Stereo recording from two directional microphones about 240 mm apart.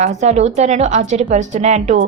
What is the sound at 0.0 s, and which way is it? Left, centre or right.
A woman's voice, right.